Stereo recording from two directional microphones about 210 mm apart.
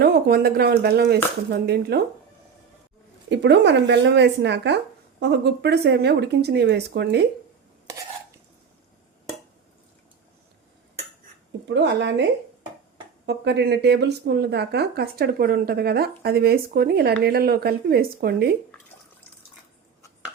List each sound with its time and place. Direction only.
0.0 s speech: 45° right (ahead or behind)
3.2 s speech: 55° right (ahead or behind)
11.7 s speech: 55° right (ahead or behind)
13.2 s speech: 55° right (ahead or behind)